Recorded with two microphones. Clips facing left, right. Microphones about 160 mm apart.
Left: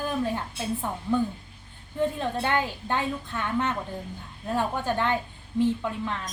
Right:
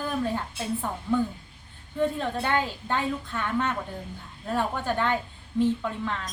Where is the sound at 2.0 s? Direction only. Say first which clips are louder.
Even; 15° left (ahead or behind).